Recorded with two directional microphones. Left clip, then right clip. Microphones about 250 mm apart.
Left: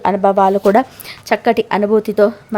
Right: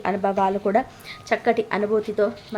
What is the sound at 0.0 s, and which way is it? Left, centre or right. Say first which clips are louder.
A woman's voice: left 9 dB; left.